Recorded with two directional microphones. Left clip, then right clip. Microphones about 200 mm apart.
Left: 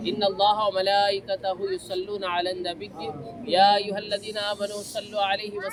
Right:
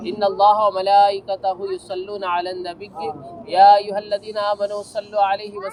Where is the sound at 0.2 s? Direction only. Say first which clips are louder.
Right 8 dB; 15° left (ahead or behind).